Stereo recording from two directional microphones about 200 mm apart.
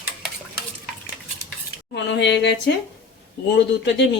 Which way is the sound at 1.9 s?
60° left (ahead or behind).